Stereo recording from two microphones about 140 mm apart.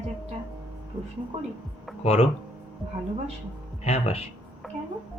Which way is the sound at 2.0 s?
45° left (ahead or behind).